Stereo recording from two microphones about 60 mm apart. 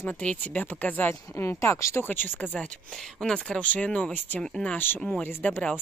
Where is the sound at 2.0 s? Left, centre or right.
Left.